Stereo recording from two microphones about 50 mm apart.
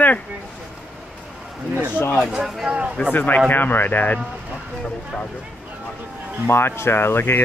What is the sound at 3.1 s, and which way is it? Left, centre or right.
Speech, left.